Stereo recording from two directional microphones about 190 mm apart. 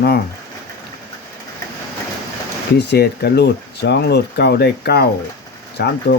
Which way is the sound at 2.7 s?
60° left (ahead or behind).